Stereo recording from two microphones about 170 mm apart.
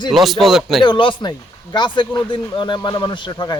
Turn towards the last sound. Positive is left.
turn(degrees=25)  # may be behind; listen again after turning